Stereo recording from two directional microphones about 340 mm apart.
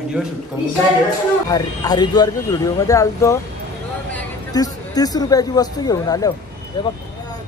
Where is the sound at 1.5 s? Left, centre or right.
Centre.